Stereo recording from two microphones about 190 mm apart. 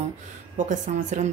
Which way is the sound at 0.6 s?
40° right (ahead or behind).